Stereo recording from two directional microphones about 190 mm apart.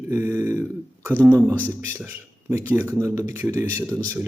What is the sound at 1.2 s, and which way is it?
Speech, 10° right (ahead or behind).